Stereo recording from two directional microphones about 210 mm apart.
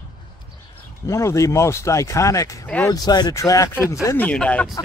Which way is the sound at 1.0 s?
15° left (ahead or behind).